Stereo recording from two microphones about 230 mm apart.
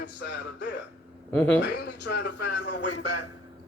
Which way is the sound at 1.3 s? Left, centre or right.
Centre.